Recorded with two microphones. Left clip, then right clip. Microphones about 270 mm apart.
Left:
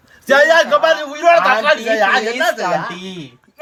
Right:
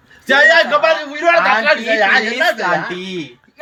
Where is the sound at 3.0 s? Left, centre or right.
Left.